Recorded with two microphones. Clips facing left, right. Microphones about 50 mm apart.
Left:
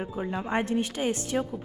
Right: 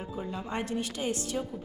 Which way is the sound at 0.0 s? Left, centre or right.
Left.